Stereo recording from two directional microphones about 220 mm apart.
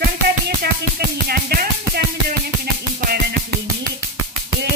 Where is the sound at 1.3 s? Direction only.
45° right (ahead or behind).